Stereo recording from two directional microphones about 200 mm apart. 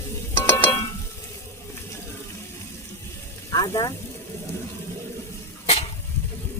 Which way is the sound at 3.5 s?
20° left (ahead or behind).